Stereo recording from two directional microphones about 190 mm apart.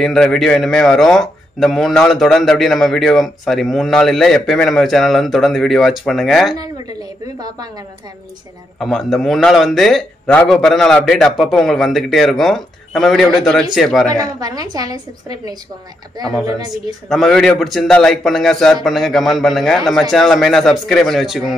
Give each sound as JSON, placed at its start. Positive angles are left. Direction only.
{"t": 0.0, "sound": "a man's voice", "side_deg": 0}
{"t": 6.5, "sound": "a woman's voice", "side_deg": -20}
{"t": 8.7, "sound": "a man's voice", "side_deg": 0}
{"t": 14.1, "sound": "a woman's voice", "side_deg": -20}
{"t": 16.7, "sound": "a man's voice", "side_deg": 0}